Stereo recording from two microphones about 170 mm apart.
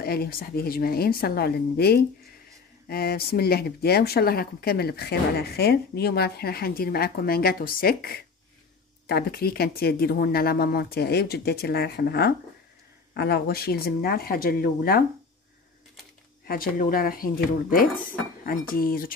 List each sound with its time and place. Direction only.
0.0 s speech: 65° left (ahead or behind)
16.4 s speech: 60° left (ahead or behind)